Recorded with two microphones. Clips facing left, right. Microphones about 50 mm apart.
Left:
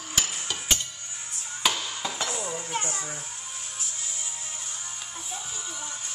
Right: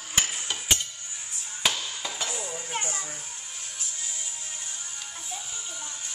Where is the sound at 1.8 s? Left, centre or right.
Centre.